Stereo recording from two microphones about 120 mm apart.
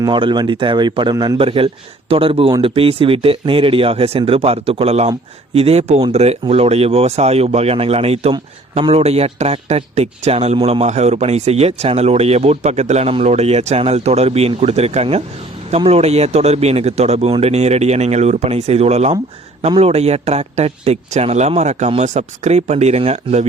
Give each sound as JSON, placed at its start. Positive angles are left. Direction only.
{"t": 0.0, "sound": "a man's voice", "side_deg": -40}
{"t": 1.4, "sound": "speech", "side_deg": -50}